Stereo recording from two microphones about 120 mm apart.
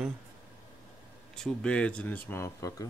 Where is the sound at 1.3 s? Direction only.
5° left (ahead or behind).